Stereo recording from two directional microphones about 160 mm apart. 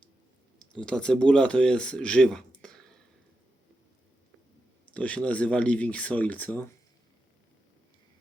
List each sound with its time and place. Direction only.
0.7 s speech: 5° left (ahead or behind)
4.9 s speech: 5° left (ahead or behind)